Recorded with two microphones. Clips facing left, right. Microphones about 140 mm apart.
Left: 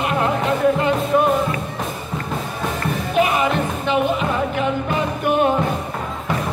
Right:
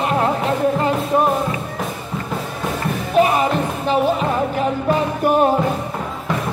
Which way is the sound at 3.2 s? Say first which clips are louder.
Right 2 dB; 35° right (ahead or behind).